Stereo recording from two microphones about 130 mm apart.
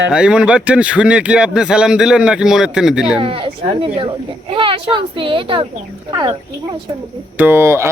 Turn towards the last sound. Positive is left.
turn(degrees=-20)  # may be behind; listen again after turning